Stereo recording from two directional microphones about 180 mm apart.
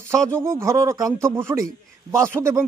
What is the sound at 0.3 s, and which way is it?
Speech, 15° right (ahead or behind).